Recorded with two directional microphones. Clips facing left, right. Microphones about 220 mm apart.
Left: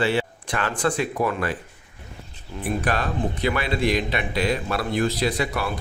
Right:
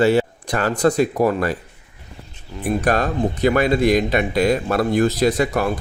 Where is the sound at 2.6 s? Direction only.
45° right (ahead or behind).